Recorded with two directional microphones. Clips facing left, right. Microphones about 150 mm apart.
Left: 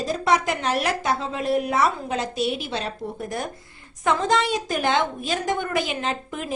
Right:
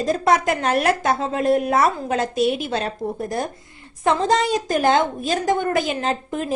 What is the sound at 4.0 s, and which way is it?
A woman's voice, 35° right (ahead or behind).